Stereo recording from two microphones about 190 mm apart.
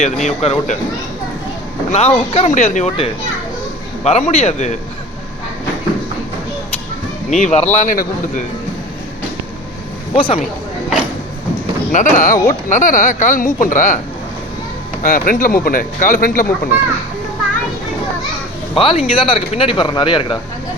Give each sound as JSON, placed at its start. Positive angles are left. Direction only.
{"t": 0.0, "sound": "speech", "side_deg": 40}
{"t": 1.9, "sound": "speech", "side_deg": 35}
{"t": 7.3, "sound": "speech", "side_deg": 40}
{"t": 10.2, "sound": "a man's voice", "side_deg": 25}
{"t": 11.9, "sound": "speech", "side_deg": 40}
{"t": 15.0, "sound": "speech", "side_deg": 50}
{"t": 18.7, "sound": "a man's voice", "side_deg": 30}